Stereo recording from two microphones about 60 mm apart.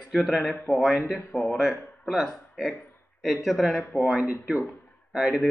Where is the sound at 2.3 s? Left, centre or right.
Centre.